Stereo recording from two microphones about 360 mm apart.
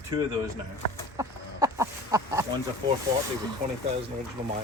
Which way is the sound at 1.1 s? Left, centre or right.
Centre.